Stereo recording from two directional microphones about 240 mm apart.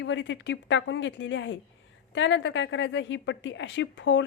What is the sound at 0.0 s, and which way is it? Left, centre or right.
A woman's voice, left.